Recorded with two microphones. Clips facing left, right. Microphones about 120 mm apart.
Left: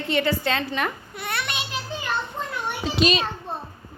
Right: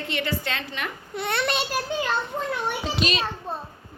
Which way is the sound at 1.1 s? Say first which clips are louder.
Right 4 dB; 25° right (ahead or behind).